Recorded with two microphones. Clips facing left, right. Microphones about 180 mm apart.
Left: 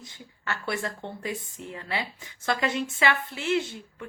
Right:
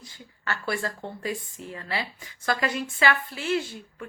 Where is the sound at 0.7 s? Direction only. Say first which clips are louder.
Right 1 dB; 20° left (ahead or behind).